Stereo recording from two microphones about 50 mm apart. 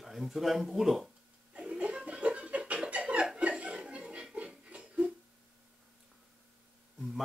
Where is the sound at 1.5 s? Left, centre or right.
Right.